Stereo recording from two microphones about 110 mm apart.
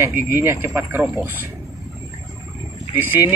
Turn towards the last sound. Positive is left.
turn(degrees=-20)  # may be behind; listen again after turning